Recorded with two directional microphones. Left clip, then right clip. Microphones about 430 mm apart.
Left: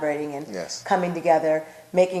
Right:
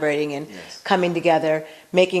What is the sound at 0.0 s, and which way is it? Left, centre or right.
A woman's voice, right.